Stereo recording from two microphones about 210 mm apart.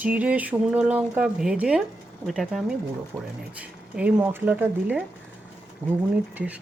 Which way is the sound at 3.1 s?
15° right (ahead or behind).